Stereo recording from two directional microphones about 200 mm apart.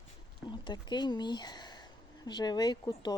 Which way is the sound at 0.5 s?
20° left (ahead or behind).